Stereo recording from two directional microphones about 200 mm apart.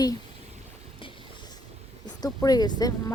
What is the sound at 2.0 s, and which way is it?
Speech, 20° left (ahead or behind).